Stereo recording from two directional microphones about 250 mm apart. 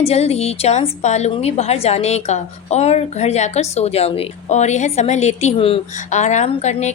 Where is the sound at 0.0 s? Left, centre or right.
Left.